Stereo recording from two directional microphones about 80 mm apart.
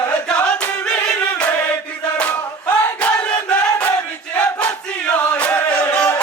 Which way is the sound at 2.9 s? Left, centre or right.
Centre.